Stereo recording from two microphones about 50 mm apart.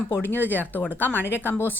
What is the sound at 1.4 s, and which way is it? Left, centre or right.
Speech, left.